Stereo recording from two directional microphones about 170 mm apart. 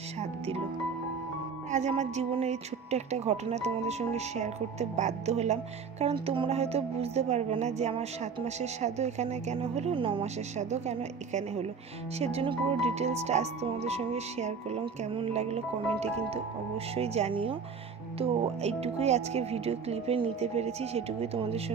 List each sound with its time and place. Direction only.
1.7 s speech: 40° right (ahead or behind)
16.9 s speech: 35° right (ahead or behind)